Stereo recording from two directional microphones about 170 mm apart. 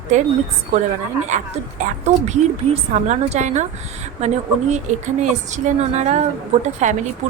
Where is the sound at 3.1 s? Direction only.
45° right (ahead or behind).